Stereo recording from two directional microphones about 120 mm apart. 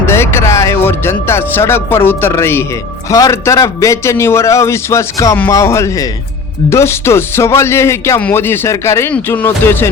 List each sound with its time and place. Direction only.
0.0 s speech: 20° left (ahead or behind)